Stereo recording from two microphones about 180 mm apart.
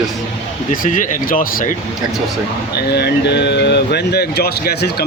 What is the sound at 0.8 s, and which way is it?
Speech, 45° left (ahead or behind).